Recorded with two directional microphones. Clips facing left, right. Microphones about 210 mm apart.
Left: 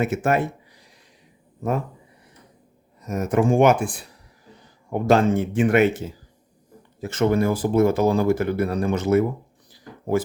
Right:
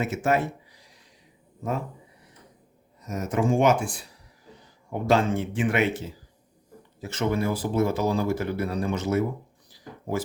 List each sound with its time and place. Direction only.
0.0 s speech: 55° left (ahead or behind)
3.1 s speech: 55° left (ahead or behind)
4.9 s speech: 45° left (ahead or behind)
7.0 s speech: 50° left (ahead or behind)